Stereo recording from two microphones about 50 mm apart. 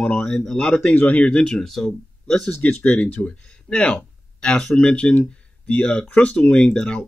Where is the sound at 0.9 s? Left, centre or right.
Left.